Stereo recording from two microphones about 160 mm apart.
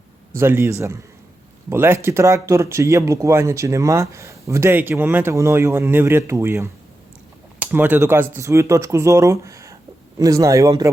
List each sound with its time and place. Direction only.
0.3 s speech: 15° right (ahead or behind)
7.7 s speech: 10° right (ahead or behind)